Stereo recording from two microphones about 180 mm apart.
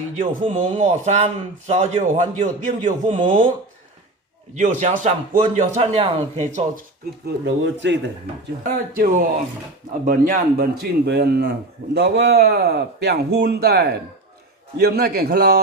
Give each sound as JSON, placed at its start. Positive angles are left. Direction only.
{"t": 0.2, "sound": "a man's voice", "side_deg": -45}
{"t": 4.5, "sound": "speech", "side_deg": -40}
{"t": 5.8, "sound": "a man's voice", "side_deg": -35}
{"t": 7.3, "sound": "speech", "side_deg": -85}
{"t": 8.6, "sound": "speech", "side_deg": -50}
{"t": 11.0, "sound": "a man's voice", "side_deg": -60}